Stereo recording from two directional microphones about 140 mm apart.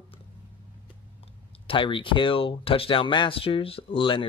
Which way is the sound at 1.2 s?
40° left (ahead or behind).